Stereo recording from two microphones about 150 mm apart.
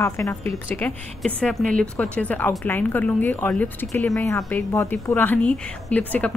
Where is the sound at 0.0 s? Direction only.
20° left (ahead or behind).